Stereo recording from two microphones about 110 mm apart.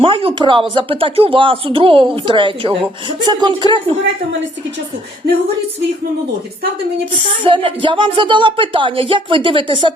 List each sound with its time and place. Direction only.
0.0 s speech: 60° right (ahead or behind)
7.4 s speech: 50° right (ahead or behind)